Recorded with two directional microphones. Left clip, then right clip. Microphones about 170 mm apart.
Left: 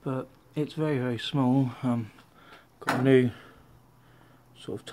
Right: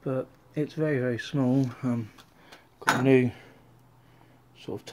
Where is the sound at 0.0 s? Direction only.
Centre (ahead or behind).